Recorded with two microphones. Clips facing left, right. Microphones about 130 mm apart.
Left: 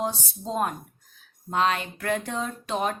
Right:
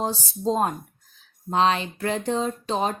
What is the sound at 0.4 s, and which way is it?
Speech, 30° right (ahead or behind).